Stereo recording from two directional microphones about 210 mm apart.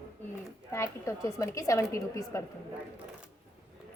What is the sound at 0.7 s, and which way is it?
A woman's voice, 15° left (ahead or behind).